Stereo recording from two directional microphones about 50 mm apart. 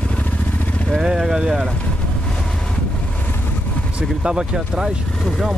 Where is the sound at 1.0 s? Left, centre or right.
Centre.